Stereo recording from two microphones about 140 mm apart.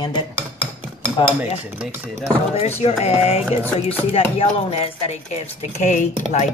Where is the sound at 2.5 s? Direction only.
50° left (ahead or behind).